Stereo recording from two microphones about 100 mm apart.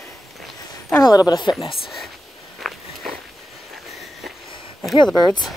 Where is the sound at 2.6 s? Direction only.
Centre (ahead or behind).